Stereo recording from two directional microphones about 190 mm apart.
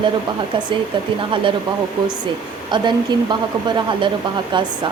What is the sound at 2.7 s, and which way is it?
A woman's voice, 25° right (ahead or behind).